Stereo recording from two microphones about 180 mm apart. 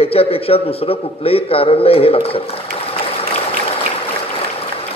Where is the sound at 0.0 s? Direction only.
35° left (ahead or behind).